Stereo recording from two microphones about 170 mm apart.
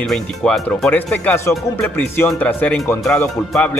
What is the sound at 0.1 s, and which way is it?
Speech, 5° left (ahead or behind).